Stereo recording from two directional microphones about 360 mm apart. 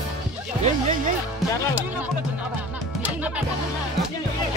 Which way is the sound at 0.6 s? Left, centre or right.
Right.